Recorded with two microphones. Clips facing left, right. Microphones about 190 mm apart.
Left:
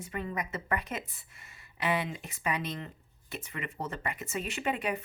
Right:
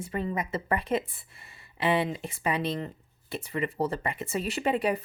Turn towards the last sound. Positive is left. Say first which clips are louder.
# right 6 dB
turn(degrees=-35)  # may be behind; listen again after turning